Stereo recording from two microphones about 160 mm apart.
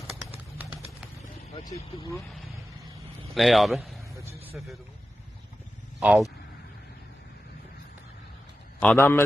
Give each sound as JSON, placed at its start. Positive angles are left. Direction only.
{"t": 3.3, "sound": "speech", "side_deg": 0}
{"t": 4.1, "sound": "vehicle", "side_deg": -20}
{"t": 4.6, "sound": "a man's voice", "side_deg": -5}
{"t": 6.0, "sound": "speech", "side_deg": -10}
{"t": 8.8, "sound": "a man's voice", "side_deg": 10}